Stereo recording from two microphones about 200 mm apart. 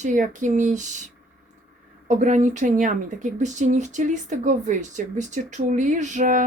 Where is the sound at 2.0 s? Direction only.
35° right (ahead or behind).